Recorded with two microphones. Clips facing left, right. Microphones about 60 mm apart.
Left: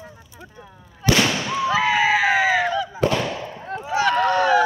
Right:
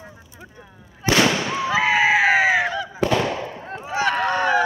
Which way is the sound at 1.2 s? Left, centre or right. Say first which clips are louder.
Right 1 dB; centre.